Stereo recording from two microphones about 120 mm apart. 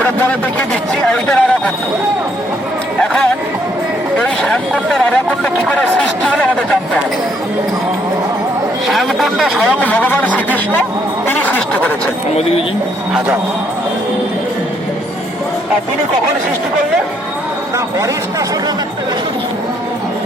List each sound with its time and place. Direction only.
0.0 s speech: 15° left (ahead or behind)
4.2 s speech: 5° left (ahead or behind)
8.9 s speech: centre (ahead or behind)
9.8 s speech: 15° left (ahead or behind)
11.3 s a sound: 15° left (ahead or behind)
12.4 s speech: 55° left (ahead or behind)
13.1 s speech: 15° right (ahead or behind)
17.7 s speech: 30° right (ahead or behind)